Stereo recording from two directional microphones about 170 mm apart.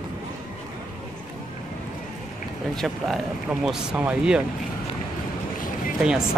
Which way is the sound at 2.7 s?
Centre (ahead or behind).